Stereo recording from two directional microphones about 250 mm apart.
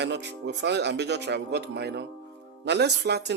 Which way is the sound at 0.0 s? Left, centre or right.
Right.